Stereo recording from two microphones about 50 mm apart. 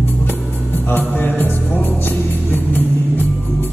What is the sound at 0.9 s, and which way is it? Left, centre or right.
Music, left.